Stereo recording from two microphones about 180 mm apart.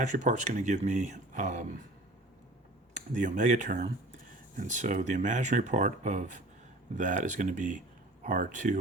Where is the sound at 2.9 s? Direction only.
45° right (ahead or behind).